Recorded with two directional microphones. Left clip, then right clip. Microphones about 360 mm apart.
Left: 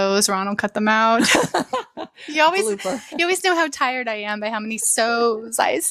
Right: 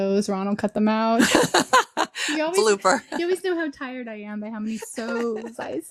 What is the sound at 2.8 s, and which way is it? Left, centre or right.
Speech, centre.